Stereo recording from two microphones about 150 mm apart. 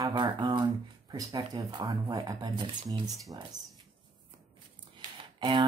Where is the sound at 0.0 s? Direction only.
30° right (ahead or behind).